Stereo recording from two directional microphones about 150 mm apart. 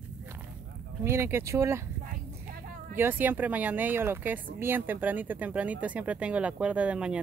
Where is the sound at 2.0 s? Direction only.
70° right (ahead or behind).